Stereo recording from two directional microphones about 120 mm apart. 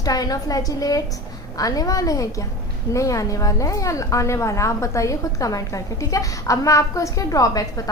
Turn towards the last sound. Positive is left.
turn(degrees=30)  # may be behind; listen again after turning